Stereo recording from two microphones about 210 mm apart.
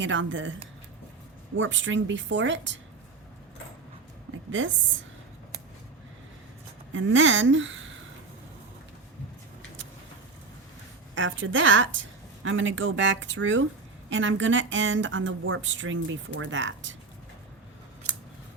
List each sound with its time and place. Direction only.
0.0 s a woman's voice: 65° right (ahead or behind)
1.5 s a woman's voice: 65° right (ahead or behind)
6.9 s a woman's voice: 65° right (ahead or behind)
11.1 s a woman's voice: 65° right (ahead or behind)